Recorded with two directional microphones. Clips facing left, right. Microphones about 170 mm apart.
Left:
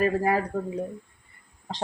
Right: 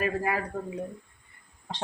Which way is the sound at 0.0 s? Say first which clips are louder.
Left 5 dB; 35° left (ahead or behind).